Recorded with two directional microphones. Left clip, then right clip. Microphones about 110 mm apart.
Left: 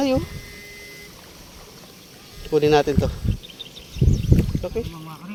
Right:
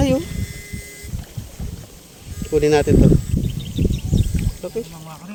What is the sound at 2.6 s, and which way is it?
Speech, 20° right (ahead or behind).